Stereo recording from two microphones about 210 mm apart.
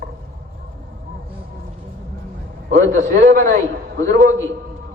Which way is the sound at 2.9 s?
35° right (ahead or behind).